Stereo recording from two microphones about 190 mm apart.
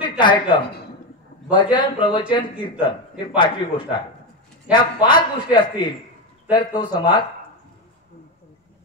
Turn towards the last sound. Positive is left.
turn(degrees=20)  # may be behind; listen again after turning